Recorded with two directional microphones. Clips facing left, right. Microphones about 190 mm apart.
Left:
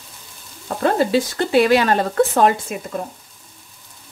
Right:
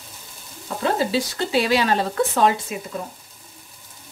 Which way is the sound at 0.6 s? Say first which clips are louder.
Left 4 dB; 55° left (ahead or behind).